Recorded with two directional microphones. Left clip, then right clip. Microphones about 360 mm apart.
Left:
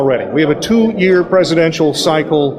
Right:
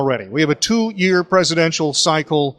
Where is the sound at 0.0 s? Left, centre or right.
Right.